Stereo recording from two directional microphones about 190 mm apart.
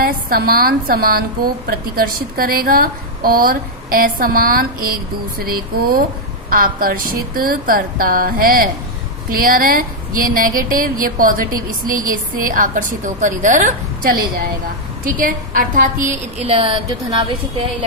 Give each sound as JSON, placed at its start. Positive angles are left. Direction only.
{"t": 0.0, "sound": "a woman's voice", "side_deg": -55}
{"t": 16.4, "sound": "a woman's voice", "side_deg": -30}